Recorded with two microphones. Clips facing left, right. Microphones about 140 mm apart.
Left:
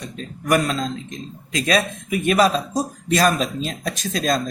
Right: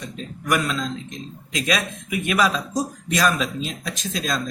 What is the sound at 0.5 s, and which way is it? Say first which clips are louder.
Speech: left 3 dB; 40° left (ahead or behind).